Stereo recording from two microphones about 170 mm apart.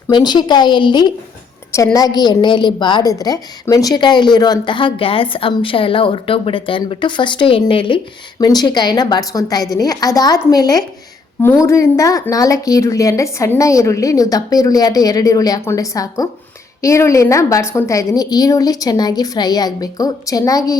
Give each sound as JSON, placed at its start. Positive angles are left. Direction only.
{"t": 0.1, "sound": "a woman's voice", "side_deg": 25}